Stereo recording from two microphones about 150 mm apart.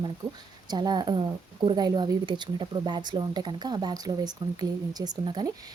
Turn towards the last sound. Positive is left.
turn(degrees=-30)  # may be behind; listen again after turning